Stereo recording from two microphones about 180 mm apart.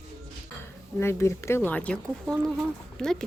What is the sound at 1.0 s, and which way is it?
A woman's voice, 15° left (ahead or behind).